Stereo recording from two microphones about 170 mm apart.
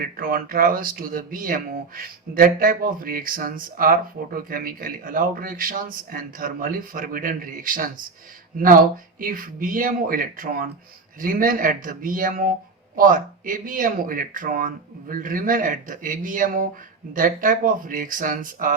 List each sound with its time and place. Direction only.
0.0 s speech: 60° right (ahead or behind)